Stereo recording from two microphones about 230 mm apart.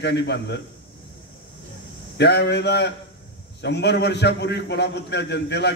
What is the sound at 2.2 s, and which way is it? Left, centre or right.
Speech, left.